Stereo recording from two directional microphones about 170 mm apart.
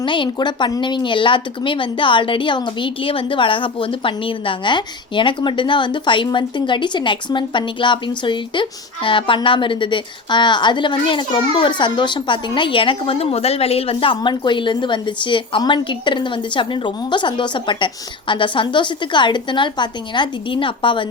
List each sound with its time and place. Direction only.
0.0 s speech: 30° left (ahead or behind)